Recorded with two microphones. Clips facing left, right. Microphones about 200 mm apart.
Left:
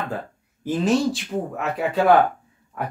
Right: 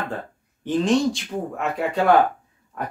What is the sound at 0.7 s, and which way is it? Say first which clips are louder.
Speech: right 1 dB; 5° left (ahead or behind).